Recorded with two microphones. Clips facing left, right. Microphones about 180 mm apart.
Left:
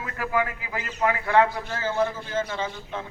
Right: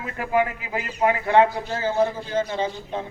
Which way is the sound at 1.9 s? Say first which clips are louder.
Right 3 dB; 35° right (ahead or behind).